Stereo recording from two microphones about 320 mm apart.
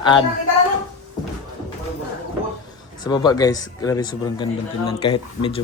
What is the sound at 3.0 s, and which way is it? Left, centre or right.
Speech, centre.